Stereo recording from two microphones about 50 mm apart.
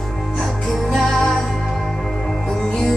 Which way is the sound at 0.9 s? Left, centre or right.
Centre.